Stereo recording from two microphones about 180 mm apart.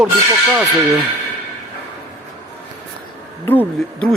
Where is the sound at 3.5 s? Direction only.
10° left (ahead or behind).